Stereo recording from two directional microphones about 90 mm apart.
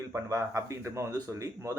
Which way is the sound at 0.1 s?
35° right (ahead or behind).